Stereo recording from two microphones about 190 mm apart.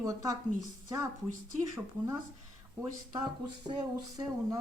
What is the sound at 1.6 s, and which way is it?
Speech, 15° right (ahead or behind).